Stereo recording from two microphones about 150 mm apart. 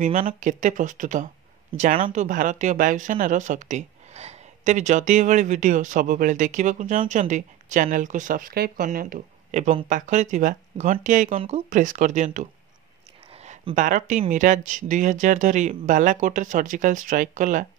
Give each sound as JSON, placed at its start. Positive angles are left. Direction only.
{"t": 0.0, "sound": "speech", "side_deg": -65}
{"t": 13.7, "sound": "speech", "side_deg": -55}